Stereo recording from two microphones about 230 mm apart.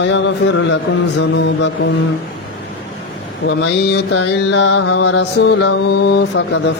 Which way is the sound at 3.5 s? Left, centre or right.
Left.